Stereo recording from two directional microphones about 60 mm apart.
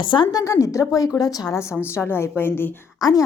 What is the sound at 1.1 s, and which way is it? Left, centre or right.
Speech, left.